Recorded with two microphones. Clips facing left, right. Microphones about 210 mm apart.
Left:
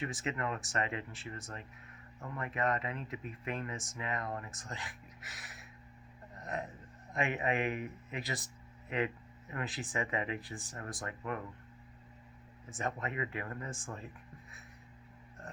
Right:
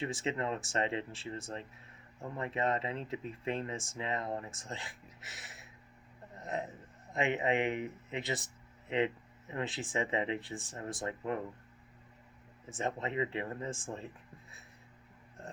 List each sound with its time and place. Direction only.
0.0 s a man's voice: 25° right (ahead or behind)
12.6 s speech: 25° right (ahead or behind)